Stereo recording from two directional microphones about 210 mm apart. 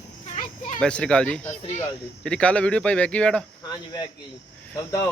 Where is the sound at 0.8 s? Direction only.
5° left (ahead or behind).